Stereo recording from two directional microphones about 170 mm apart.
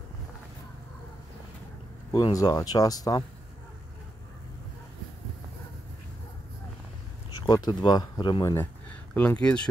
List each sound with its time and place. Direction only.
2.1 s speech: 25° left (ahead or behind)
7.4 s speech: 25° left (ahead or behind)
9.1 s speech: 10° left (ahead or behind)